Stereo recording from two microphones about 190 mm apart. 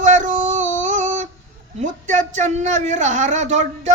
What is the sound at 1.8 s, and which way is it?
A man's voice, 40° right (ahead or behind).